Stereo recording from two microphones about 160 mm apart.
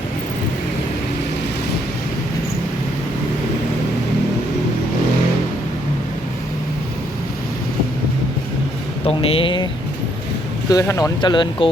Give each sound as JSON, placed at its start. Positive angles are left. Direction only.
{"t": 9.0, "sound": "speech", "side_deg": 35}
{"t": 10.7, "sound": "speech", "side_deg": 20}